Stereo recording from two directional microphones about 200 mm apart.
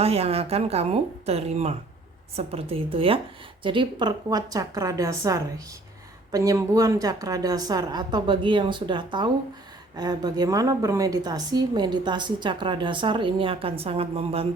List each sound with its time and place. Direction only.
0.0 s a woman's voice: 30° right (ahead or behind)